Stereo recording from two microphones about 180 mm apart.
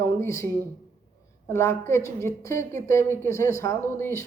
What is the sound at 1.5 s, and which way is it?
A woman's voice, 15° left (ahead or behind).